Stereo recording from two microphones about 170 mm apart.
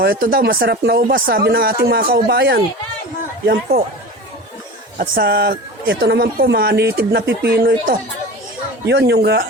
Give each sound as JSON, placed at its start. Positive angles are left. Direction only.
{"t": 0.0, "sound": "speech", "side_deg": -60}
{"t": 3.4, "sound": "speech", "side_deg": -60}
{"t": 4.9, "sound": "a woman's voice", "side_deg": -65}